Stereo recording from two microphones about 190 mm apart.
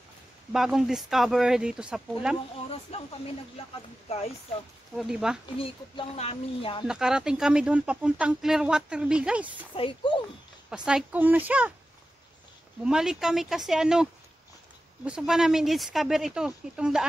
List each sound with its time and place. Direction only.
0.5 s speech: centre (ahead or behind)
2.7 s speech: 30° left (ahead or behind)
4.9 s speech: 5° right (ahead or behind)
5.6 s speech: 30° left (ahead or behind)
6.9 s speech: 5° right (ahead or behind)
9.8 s speech: 25° left (ahead or behind)
10.9 s speech: 5° right (ahead or behind)
12.8 s speech: 5° right (ahead or behind)
15.0 s speech: 5° right (ahead or behind)